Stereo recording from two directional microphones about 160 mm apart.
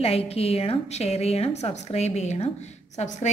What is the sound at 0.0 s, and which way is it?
A woman's voice, 40° left (ahead or behind).